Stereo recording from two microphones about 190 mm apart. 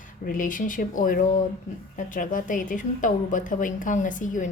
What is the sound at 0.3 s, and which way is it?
A woman's voice, 45° left (ahead or behind).